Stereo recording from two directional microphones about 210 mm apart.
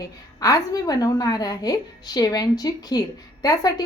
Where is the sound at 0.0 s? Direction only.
15° left (ahead or behind).